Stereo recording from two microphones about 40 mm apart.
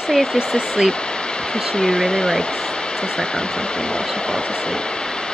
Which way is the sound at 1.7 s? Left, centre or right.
Centre.